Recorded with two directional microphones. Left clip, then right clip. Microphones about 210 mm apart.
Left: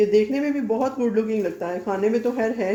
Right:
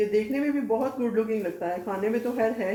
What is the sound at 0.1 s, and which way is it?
Speech, 45° left (ahead or behind).